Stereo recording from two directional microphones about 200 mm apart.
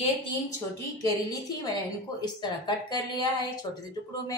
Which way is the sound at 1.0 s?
15° left (ahead or behind).